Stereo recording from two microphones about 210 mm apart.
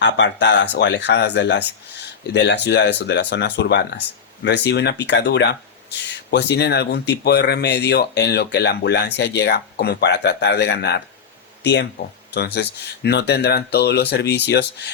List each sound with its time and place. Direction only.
0.0 s speech: 60° left (ahead or behind)